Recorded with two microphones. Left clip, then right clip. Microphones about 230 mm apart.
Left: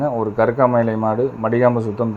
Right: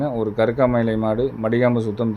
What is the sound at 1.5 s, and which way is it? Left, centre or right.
Speech, right.